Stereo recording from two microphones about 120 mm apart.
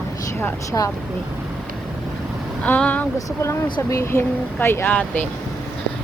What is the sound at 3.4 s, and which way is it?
Speech, 25° left (ahead or behind).